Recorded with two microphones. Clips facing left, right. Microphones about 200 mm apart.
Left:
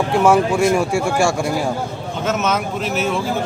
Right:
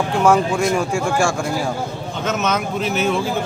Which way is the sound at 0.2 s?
5° left (ahead or behind).